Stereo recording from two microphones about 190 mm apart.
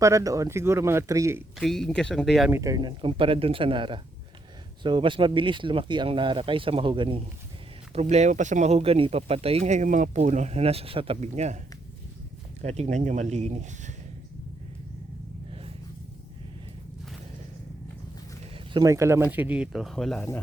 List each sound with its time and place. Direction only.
0.0 s speech: 15° right (ahead or behind)
1.5 s speech: centre (ahead or behind)
2.5 s speech: 15° right (ahead or behind)
8.1 s speech: 40° right (ahead or behind)
12.6 s speech: 35° right (ahead or behind)
18.7 s speech: 20° right (ahead or behind); by 20.2 s centre (ahead or behind)